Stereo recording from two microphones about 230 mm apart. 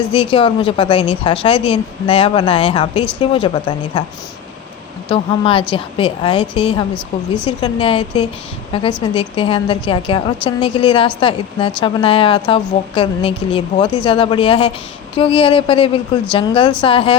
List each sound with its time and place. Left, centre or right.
0.1 s a woman's voice: left
5.0 s a woman's voice: left